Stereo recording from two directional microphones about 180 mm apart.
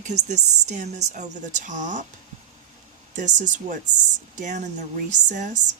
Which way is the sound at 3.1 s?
45° right (ahead or behind).